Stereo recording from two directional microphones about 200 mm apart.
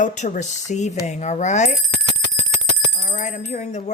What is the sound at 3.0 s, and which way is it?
Speech, 35° left (ahead or behind).